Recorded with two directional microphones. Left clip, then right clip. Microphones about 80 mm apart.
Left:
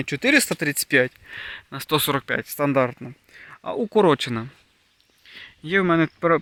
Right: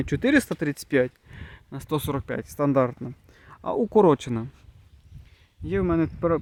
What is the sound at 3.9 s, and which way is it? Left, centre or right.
Speech, right.